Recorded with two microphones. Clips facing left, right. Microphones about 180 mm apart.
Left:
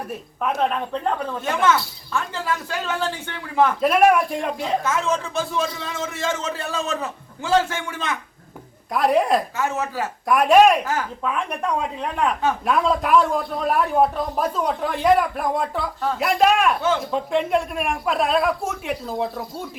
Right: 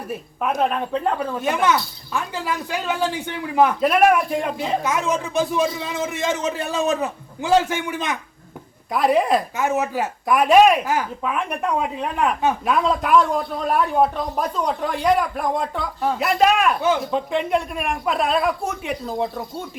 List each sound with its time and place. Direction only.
0.5 s speech: 5° right (ahead or behind)
1.4 s a man's voice: 15° right (ahead or behind)
3.8 s speech: centre (ahead or behind)
4.8 s a man's voice: 15° right (ahead or behind)
8.9 s speech: centre (ahead or behind)
9.6 s a man's voice: 15° right (ahead or behind)
10.2 s a man's voice: centre (ahead or behind)
12.6 s speech: centre (ahead or behind)